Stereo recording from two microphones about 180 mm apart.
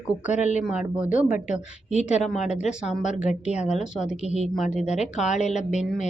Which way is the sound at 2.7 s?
5° right (ahead or behind).